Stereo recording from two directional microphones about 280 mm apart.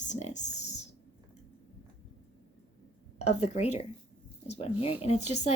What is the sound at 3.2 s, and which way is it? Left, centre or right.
Speech, left.